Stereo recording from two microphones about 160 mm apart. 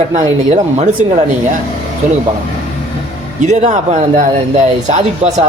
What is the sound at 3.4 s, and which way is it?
Speech, 50° right (ahead or behind).